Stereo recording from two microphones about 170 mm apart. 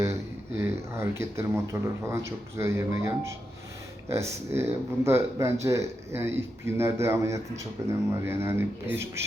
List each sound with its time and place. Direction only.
0.0 s speech: 15° right (ahead or behind)